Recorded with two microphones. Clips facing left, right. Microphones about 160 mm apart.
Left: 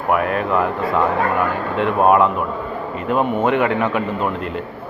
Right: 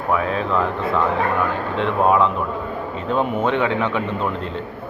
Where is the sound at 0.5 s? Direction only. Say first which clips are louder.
Left 2 dB; 15° left (ahead or behind).